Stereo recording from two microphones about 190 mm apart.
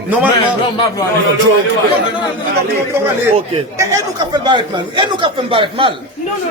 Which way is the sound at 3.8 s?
20° right (ahead or behind).